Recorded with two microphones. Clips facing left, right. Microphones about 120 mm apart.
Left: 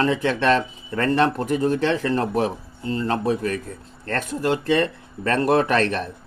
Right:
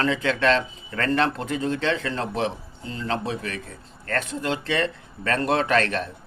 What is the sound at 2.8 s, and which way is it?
Speech, 45° left (ahead or behind).